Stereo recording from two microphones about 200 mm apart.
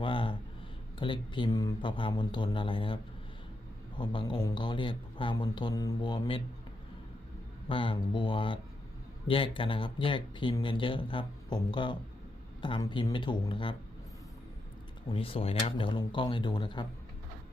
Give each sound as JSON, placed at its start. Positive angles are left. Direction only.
{"t": 0.0, "sound": "a sound", "side_deg": 25}
{"t": 0.9, "sound": "speech", "side_deg": 25}
{"t": 7.7, "sound": "speech", "side_deg": 25}
{"t": 15.1, "sound": "speech", "side_deg": 25}